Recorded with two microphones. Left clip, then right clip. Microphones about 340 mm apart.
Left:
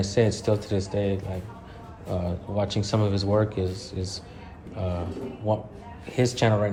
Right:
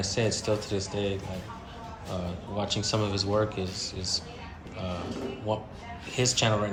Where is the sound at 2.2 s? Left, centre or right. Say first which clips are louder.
Left 5 dB; left.